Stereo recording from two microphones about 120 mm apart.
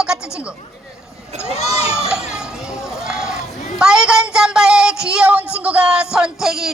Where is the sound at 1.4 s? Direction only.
55° left (ahead or behind).